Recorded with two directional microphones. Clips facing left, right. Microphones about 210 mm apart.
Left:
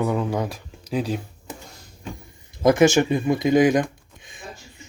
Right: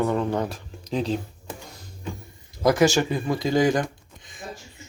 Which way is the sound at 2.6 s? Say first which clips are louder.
Left 3 dB; 20° left (ahead or behind).